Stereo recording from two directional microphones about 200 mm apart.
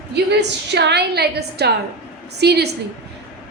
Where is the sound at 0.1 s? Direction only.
60° right (ahead or behind).